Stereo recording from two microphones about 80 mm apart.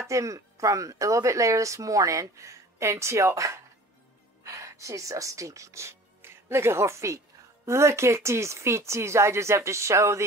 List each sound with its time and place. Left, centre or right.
0.1 s speech: right